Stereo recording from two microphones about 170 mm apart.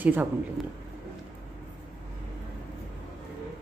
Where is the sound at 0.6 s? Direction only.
Centre (ahead or behind).